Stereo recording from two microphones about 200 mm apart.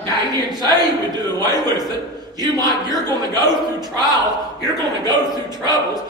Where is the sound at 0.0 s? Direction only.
20° right (ahead or behind).